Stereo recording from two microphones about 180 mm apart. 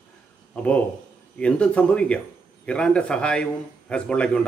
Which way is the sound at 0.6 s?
5° left (ahead or behind).